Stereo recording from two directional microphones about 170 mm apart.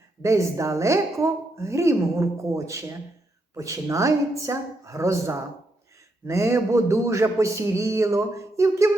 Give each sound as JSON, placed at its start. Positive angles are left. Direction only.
{"t": 0.2, "sound": "a woman's voice", "side_deg": -20}